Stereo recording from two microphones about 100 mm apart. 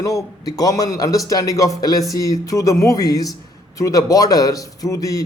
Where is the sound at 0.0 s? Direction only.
35° left (ahead or behind).